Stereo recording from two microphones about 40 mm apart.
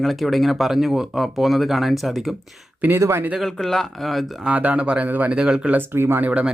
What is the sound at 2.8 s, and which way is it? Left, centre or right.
Speech, right.